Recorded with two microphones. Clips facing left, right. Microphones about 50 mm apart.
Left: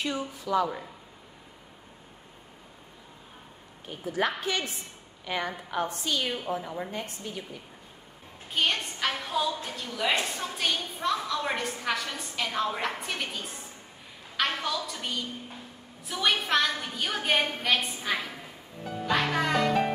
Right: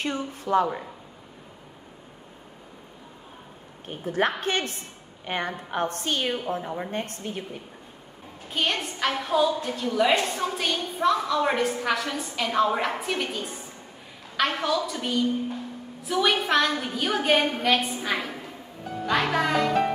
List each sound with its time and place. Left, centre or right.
0.0 s a woman's voice: right
3.8 s a woman's voice: right
8.5 s a woman's voice: centre